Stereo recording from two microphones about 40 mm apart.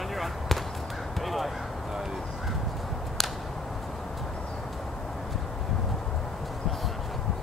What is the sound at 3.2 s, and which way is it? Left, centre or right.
Whip, centre.